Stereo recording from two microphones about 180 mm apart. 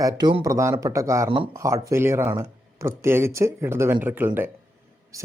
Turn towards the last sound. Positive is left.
turn(degrees=-10)  # may be behind; listen again after turning